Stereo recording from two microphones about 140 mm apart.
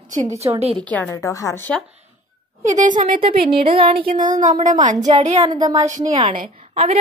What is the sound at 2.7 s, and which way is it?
Speech, 65° right (ahead or behind).